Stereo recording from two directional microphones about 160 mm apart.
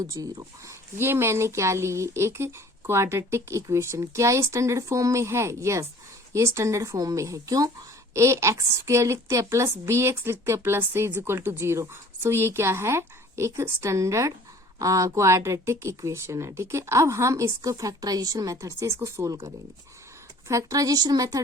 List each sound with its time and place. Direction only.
0.1 s a woman's voice: 20° right (ahead or behind)
20.5 s speech: 20° right (ahead or behind)